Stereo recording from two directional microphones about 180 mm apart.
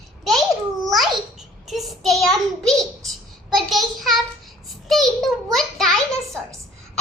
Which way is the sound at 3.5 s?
Centre (ahead or behind).